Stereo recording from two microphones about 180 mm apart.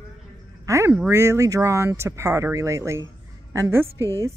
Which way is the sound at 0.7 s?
15° right (ahead or behind).